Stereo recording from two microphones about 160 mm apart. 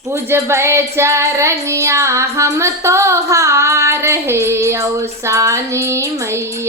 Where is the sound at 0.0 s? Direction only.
15° right (ahead or behind).